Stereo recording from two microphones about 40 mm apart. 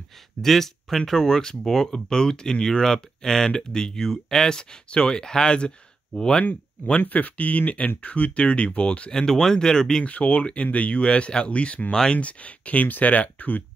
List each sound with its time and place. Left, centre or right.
0.4 s speech: centre
7.1 s speech: left
9.1 s speech: centre
10.0 s speech: left
11.9 s speech: centre
12.2 s speech: left